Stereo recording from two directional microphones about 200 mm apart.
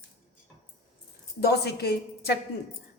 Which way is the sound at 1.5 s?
55° left (ahead or behind).